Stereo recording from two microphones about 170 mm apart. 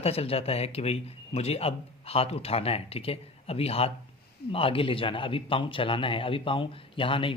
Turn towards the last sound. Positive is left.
turn(degrees=30)  # may be behind; listen again after turning